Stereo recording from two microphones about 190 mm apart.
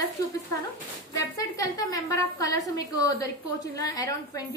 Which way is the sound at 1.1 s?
20° left (ahead or behind).